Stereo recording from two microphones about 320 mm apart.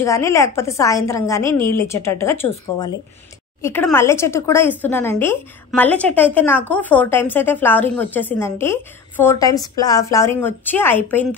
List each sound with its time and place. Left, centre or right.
0.0 s a woman's voice: centre